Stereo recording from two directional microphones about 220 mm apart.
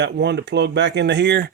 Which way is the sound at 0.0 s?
50° right (ahead or behind).